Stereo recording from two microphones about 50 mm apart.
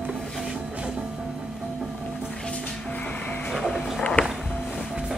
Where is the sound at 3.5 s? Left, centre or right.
Centre.